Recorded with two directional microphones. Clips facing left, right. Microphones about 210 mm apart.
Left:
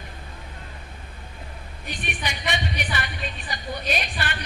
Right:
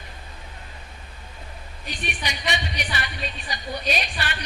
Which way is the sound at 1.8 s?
50° left (ahead or behind).